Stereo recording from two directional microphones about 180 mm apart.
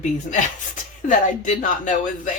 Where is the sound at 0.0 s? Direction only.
40° left (ahead or behind).